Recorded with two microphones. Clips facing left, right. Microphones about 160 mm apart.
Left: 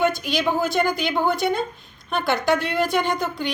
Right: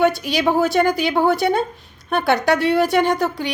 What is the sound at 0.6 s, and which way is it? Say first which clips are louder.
A woman's voice: right 5 dB; 75° right (ahead or behind).